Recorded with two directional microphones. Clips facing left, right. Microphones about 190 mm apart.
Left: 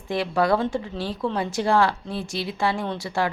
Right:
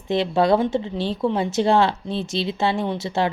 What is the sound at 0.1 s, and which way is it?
Speech, 25° right (ahead or behind).